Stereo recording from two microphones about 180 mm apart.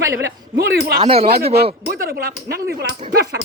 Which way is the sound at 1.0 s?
30° right (ahead or behind).